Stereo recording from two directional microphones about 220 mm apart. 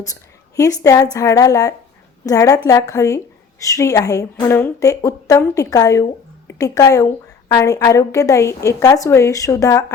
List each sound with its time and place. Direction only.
0.5 s a woman's voice: 15° left (ahead or behind)